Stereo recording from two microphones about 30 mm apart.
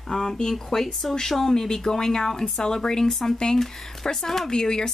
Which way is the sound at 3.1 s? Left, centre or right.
Centre.